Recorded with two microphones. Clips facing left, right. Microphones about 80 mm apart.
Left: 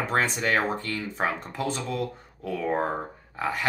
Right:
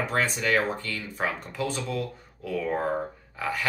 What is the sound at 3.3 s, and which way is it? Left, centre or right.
Speech, left.